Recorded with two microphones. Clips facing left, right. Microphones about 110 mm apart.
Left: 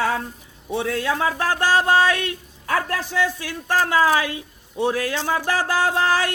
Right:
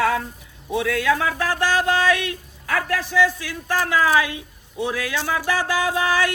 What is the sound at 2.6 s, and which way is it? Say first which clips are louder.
A man's voice: even; 40° left (ahead or behind).